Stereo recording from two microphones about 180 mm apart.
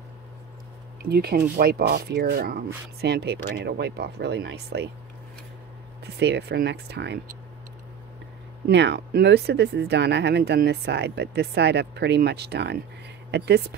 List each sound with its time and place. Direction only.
1.0 s speech: 60° right (ahead or behind)
6.1 s speech: 70° right (ahead or behind)
8.6 s speech: 70° right (ahead or behind)